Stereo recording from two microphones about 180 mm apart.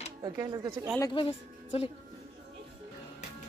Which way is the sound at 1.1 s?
30° left (ahead or behind).